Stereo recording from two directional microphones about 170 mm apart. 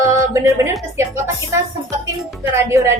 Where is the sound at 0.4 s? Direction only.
15° right (ahead or behind).